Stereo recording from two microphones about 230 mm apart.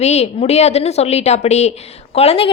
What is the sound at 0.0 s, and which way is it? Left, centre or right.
A woman's voice, left.